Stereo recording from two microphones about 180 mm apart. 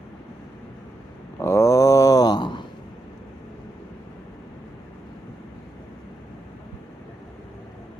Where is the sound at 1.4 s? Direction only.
15° left (ahead or behind).